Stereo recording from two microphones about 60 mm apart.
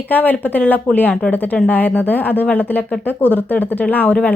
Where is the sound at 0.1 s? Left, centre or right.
Left.